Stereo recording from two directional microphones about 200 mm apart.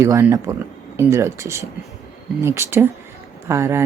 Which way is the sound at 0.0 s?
15° right (ahead or behind).